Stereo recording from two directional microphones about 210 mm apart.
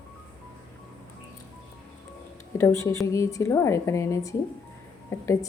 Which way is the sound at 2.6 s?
15° left (ahead or behind).